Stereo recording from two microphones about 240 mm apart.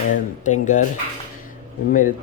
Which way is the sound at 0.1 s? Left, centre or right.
Left.